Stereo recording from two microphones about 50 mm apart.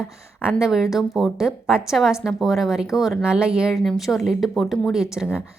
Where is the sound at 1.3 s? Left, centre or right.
Centre.